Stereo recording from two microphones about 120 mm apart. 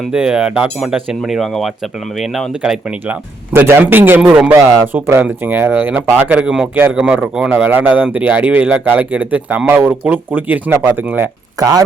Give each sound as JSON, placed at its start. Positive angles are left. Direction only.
{"t": 0.1, "sound": "speech", "side_deg": -5}
{"t": 3.1, "sound": "speech", "side_deg": -20}
{"t": 4.5, "sound": "speech", "side_deg": -20}
{"t": 11.6, "sound": "speech", "side_deg": -30}